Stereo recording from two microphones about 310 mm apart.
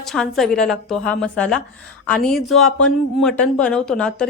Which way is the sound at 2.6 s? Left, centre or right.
Left.